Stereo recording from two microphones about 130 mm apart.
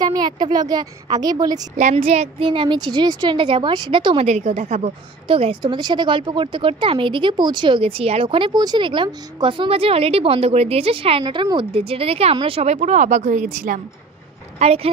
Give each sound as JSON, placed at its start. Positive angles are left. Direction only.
{"t": 0.0, "sound": "a woman's voice", "side_deg": -30}
{"t": 2.0, "sound": "a woman's voice", "side_deg": -50}
{"t": 4.3, "sound": "a woman's voice", "side_deg": -60}
{"t": 5.3, "sound": "a woman's voice", "side_deg": -45}
{"t": 14.6, "sound": "speech", "side_deg": -50}